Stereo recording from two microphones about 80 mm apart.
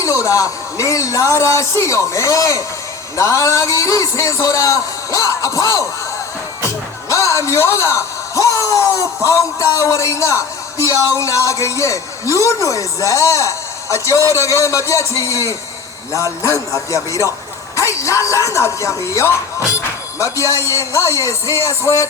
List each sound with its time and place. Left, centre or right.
0.0 s a man's voice: left
5.4 s music: left
7.1 s a man's voice: left
16.1 s music: left
17.7 s a man's voice: left